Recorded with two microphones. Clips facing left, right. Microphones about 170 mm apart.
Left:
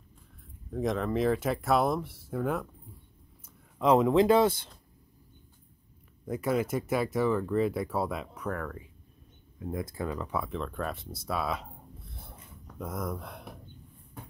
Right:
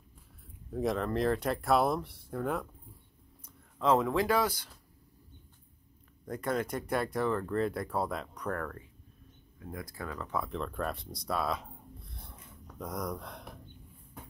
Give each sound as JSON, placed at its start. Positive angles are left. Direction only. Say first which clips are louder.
{"t": 0.7, "sound": "speech", "louder": "left 1 dB", "side_deg": 0}
{"t": 3.4, "sound": "speech", "louder": "left 3 dB", "side_deg": 15}
{"t": 6.2, "sound": "speech", "louder": "left 4 dB", "side_deg": 5}
{"t": 9.6, "sound": "speech", "louder": "left 7 dB", "side_deg": 25}
{"t": 10.4, "sound": "speech", "louder": "left 1 dB", "side_deg": 0}
{"t": 12.0, "sound": "a sound", "louder": "left 2 dB", "side_deg": 0}